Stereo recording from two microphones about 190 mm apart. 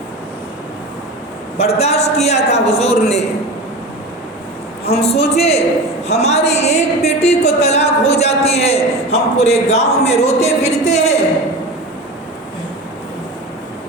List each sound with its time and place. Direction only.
1.5 s speech: 35° left (ahead or behind)
4.9 s speech: 35° left (ahead or behind)